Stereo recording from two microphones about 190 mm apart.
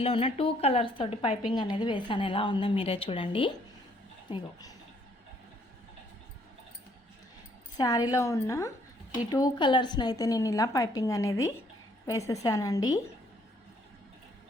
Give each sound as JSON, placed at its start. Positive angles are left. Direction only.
{"t": 0.0, "sound": "a woman's voice", "side_deg": 30}
{"t": 7.8, "sound": "a woman's voice", "side_deg": 20}